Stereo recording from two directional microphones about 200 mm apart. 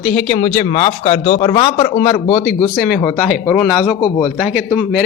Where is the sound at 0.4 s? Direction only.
30° left (ahead or behind).